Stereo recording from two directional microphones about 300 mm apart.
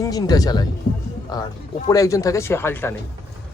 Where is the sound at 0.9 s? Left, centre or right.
Left.